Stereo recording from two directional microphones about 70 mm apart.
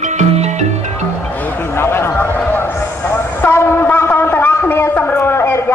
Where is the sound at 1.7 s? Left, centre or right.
Left.